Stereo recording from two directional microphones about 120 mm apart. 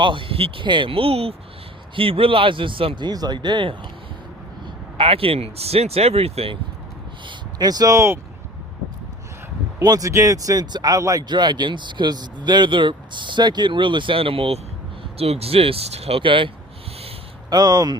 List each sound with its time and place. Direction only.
0.0 s speech: 45° right (ahead or behind)
7.3 s speech: 35° right (ahead or behind)
9.7 s speech: 30° right (ahead or behind); by 16.5 s 45° right (ahead or behind)
17.5 s speech: 30° right (ahead or behind)